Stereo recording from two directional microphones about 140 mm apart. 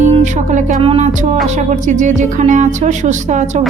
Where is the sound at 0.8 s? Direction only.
40° right (ahead or behind).